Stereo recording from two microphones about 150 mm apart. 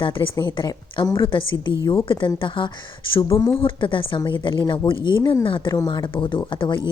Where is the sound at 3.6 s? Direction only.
35° left (ahead or behind).